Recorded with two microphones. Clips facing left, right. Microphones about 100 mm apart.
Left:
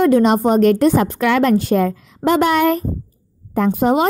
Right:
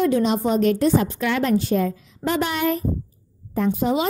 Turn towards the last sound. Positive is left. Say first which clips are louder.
# left 6 dB
turn(degrees=55)  # may be behind; listen again after turning